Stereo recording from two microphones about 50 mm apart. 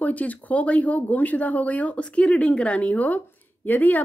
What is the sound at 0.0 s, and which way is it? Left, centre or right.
Speech, left.